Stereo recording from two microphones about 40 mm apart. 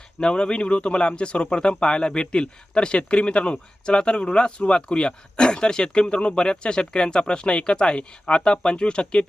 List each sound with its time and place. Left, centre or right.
0.2 s speech: left